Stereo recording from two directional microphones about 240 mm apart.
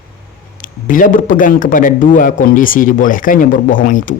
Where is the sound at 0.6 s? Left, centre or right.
Left.